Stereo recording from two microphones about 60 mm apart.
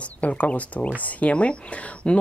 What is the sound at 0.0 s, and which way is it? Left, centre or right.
Speech, left.